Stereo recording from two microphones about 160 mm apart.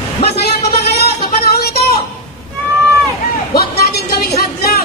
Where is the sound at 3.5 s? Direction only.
75° left (ahead or behind).